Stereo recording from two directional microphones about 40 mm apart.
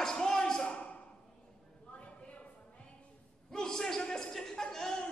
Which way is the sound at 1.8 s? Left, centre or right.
Left.